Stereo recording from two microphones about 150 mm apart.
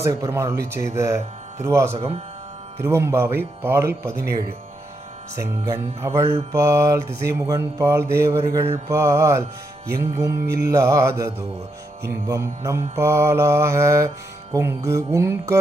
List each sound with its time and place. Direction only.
0.0 s mantra: 20° right (ahead or behind)
1.9 s speech: 40° right (ahead or behind)
2.8 s speech: 15° right (ahead or behind)
5.4 s mantra: 20° right (ahead or behind)
14.5 s speech: 15° right (ahead or behind)
14.8 s mantra: 20° right (ahead or behind)